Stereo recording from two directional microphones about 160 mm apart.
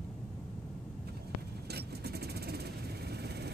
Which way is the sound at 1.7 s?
90° right.